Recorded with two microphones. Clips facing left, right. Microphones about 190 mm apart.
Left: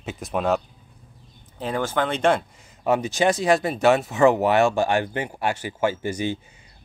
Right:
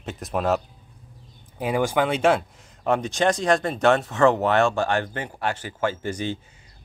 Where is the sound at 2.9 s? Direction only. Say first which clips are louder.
Left 1 dB; 5° left (ahead or behind).